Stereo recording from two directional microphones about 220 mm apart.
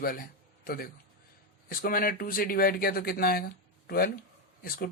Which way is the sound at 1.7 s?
40° left (ahead or behind).